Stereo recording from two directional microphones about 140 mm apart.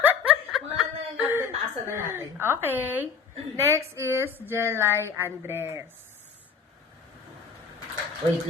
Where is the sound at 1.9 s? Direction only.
20° right (ahead or behind).